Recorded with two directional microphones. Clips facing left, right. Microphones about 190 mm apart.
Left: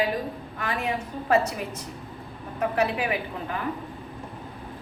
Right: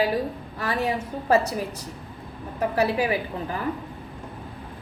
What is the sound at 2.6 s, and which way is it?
Speech, 35° right (ahead or behind).